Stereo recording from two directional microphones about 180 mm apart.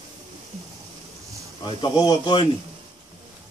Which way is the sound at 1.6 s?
20° left (ahead or behind).